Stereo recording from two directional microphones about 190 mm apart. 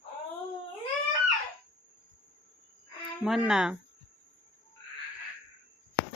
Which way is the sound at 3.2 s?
Centre (ahead or behind).